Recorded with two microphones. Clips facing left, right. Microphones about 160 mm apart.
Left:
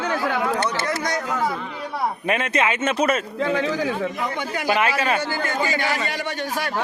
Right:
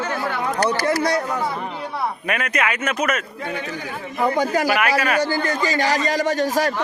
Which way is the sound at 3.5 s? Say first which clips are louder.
Left 6 dB; 90° left.